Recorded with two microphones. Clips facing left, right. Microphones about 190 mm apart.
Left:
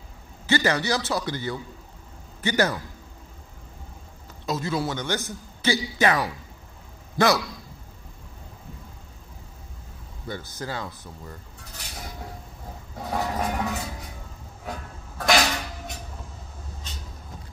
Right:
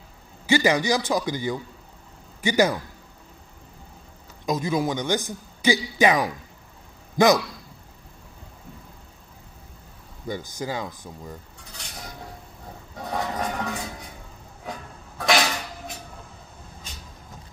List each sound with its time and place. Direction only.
0.5 s a man's voice: 15° right (ahead or behind)
4.5 s a man's voice: 15° right (ahead or behind)
10.2 s a man's voice: 15° right (ahead or behind)
13.1 s music: 5° left (ahead or behind)
15.1 s a sound: centre (ahead or behind)